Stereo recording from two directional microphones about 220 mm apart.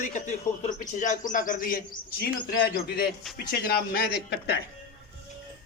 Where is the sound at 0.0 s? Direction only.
35° left (ahead or behind).